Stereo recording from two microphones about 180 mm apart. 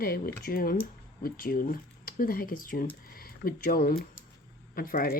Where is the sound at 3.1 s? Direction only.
55° left (ahead or behind).